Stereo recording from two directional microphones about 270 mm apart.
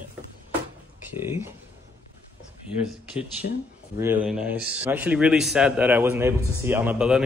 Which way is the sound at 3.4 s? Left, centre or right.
Left.